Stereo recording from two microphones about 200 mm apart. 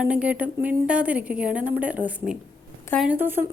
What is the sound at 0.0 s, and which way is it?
Speech, 5° right (ahead or behind).